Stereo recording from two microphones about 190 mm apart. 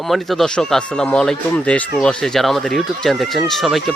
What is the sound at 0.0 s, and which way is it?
Speech, centre (ahead or behind).